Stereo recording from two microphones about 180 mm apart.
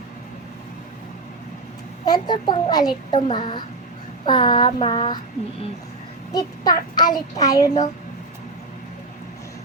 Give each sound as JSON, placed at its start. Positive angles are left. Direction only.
{"t": 2.0, "sound": "a child's voice", "side_deg": 25}
{"t": 6.3, "sound": "a child's voice", "side_deg": 20}